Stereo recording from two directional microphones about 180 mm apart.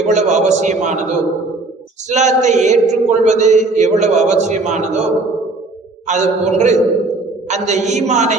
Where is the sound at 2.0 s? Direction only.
40° right (ahead or behind).